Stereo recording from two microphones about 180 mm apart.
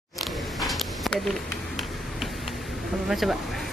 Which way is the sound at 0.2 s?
Centre (ahead or behind).